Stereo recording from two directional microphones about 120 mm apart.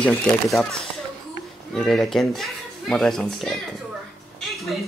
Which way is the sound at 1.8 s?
5° left (ahead or behind).